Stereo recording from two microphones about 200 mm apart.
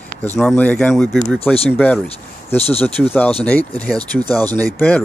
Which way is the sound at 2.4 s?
30° left (ahead or behind).